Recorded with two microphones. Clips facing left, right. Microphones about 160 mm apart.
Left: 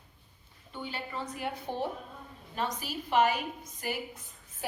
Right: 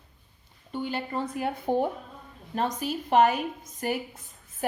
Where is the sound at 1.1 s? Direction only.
50° right (ahead or behind).